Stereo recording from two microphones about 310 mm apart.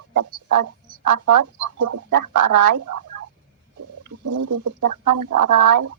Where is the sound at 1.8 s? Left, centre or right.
Right.